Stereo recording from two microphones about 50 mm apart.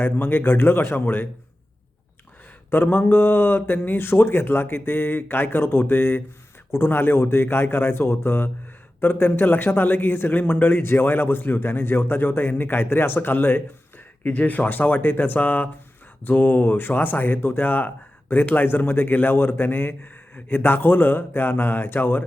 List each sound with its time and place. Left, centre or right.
0.0 s speech: left
2.6 s speech: left
14.3 s speech: left